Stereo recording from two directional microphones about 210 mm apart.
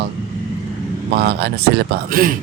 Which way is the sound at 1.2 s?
50° right (ahead or behind).